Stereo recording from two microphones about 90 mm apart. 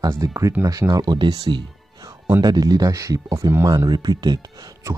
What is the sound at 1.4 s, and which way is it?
Music, 60° right (ahead or behind).